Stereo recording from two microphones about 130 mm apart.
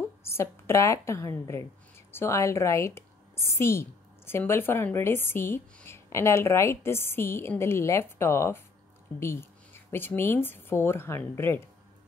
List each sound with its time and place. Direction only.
0.2 s a woman's voice: 20° left (ahead or behind)